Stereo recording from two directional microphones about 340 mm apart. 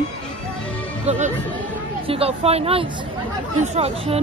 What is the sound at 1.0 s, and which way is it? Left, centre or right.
Speech, right.